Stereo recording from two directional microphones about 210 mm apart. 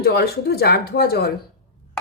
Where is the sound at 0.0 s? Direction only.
50° left (ahead or behind).